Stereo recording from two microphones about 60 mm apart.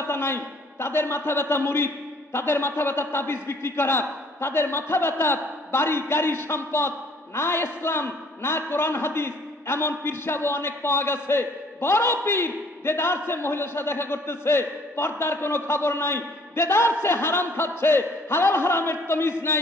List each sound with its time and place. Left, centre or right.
0.0 s a man's voice: left